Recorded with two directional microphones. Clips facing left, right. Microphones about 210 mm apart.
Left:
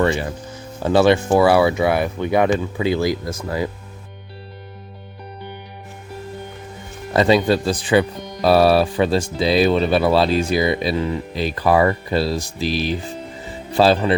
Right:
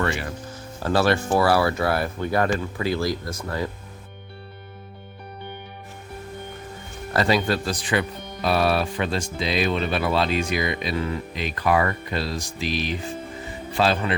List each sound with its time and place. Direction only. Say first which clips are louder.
0.8 s speech: left 6 dB; 20° left (ahead or behind)
7.1 s speech: left 6 dB; 25° left (ahead or behind)